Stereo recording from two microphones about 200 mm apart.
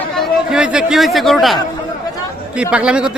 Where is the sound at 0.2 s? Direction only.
5° right (ahead or behind).